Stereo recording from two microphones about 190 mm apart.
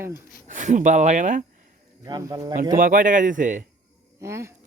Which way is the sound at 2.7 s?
45° right (ahead or behind).